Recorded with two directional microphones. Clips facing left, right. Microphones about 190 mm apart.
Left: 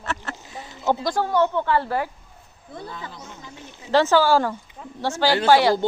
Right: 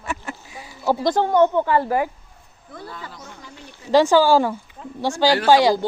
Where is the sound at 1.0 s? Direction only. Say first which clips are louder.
Right 7 dB; 20° right (ahead or behind).